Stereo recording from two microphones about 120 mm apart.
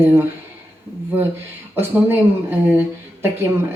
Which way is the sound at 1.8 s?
15° right (ahead or behind).